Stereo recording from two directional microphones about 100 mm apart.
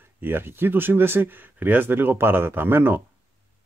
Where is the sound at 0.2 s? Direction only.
20° right (ahead or behind).